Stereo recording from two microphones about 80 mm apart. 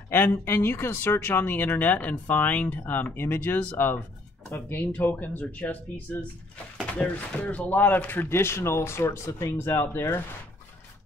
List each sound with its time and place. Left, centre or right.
0.1 s speech: left
7.0 s speech: centre; by 10.2 s left